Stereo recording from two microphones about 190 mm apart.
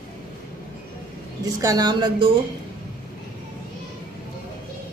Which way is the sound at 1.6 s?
20° right (ahead or behind).